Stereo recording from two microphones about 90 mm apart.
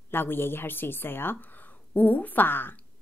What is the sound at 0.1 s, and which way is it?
A woman's voice, 25° left (ahead or behind).